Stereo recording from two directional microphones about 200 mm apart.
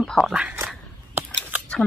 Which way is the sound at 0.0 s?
Centre (ahead or behind).